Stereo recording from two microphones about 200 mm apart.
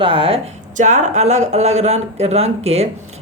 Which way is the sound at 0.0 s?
25° right (ahead or behind).